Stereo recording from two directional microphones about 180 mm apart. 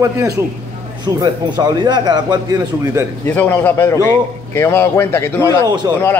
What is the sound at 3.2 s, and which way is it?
A man's voice, 10° left (ahead or behind).